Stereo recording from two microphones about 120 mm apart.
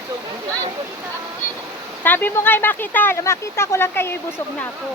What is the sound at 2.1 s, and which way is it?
Speech, 15° left (ahead or behind).